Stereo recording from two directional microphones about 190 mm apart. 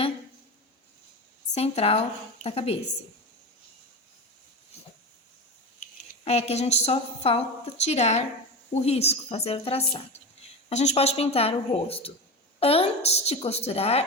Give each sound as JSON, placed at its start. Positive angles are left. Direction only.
{"t": 1.5, "sound": "a woman's voice", "side_deg": 35}
{"t": 5.8, "sound": "a woman's voice", "side_deg": 35}